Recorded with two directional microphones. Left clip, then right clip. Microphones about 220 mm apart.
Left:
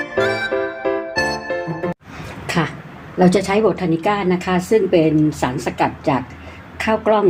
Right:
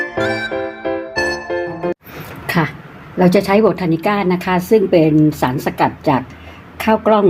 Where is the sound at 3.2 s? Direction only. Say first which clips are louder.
Right 3 dB; 40° right (ahead or behind).